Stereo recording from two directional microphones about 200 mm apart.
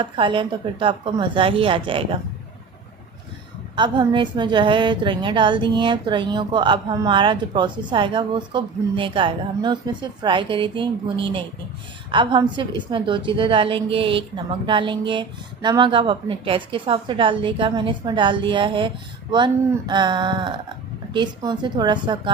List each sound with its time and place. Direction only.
0.0 s a woman's voice: 25° right (ahead or behind)
3.8 s a woman's voice: 25° right (ahead or behind)
12.1 s a woman's voice: 25° right (ahead or behind)
19.9 s a woman's voice: 20° right (ahead or behind)